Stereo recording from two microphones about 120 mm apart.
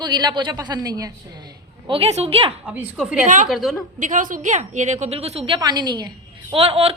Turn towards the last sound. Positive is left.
turn(degrees=-55)  # may be behind; listen again after turning